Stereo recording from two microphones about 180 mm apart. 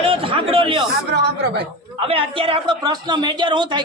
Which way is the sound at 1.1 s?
70° right (ahead or behind).